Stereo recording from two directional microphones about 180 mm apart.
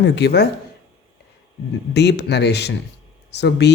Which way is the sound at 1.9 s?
70° left (ahead or behind).